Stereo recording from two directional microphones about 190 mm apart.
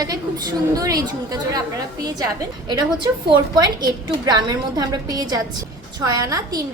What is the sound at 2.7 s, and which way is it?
A woman's voice, 20° right (ahead or behind).